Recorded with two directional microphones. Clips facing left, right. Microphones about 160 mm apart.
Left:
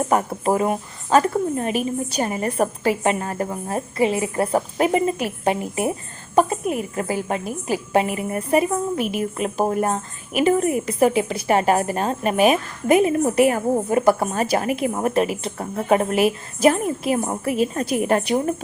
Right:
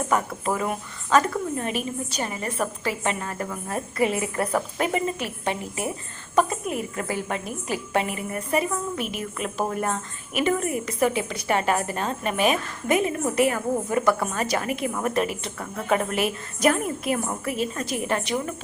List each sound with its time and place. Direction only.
0.1 s a woman's voice: 35° left (ahead or behind)